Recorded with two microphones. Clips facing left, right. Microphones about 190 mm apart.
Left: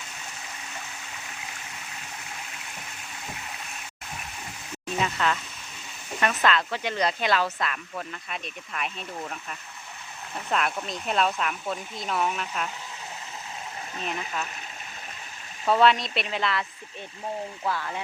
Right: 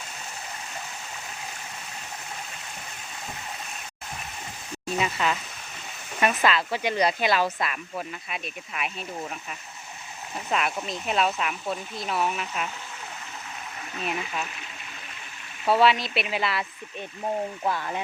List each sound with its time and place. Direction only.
4.9 s a sound: 10° right (ahead or behind)
6.1 s speech: 10° right (ahead or behind)
13.9 s speech: 35° left (ahead or behind)
15.6 s speech: 5° right (ahead or behind)
17.6 s speech: 20° right (ahead or behind)